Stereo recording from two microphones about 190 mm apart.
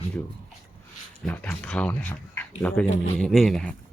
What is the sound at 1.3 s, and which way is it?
Speech, 5° left (ahead or behind).